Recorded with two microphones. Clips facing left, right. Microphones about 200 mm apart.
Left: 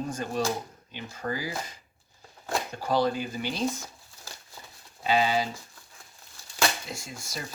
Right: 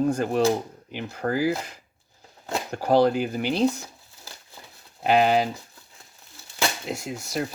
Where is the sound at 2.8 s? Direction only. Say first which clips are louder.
Right 7 dB; 60° right (ahead or behind).